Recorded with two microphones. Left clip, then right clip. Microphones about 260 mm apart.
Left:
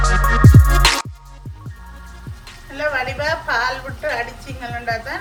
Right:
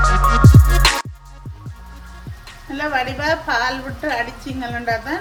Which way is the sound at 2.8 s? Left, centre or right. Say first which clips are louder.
Even; right.